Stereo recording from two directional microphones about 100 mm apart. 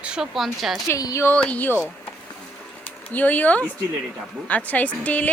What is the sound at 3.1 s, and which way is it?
Speech, 15° left (ahead or behind).